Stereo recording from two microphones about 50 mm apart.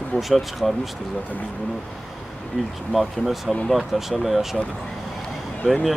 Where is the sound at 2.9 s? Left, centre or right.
Centre.